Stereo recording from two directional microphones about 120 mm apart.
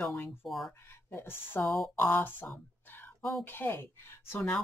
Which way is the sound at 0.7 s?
20° left (ahead or behind).